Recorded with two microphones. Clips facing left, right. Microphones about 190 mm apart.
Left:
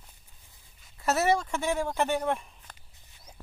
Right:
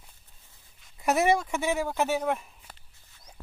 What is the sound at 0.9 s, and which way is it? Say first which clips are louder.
Speech: right 2 dB; 15° right (ahead or behind).